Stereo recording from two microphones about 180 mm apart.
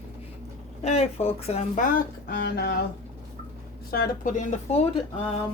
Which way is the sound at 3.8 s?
55° left (ahead or behind).